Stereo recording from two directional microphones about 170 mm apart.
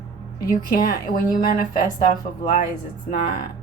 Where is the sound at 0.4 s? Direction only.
60° left (ahead or behind).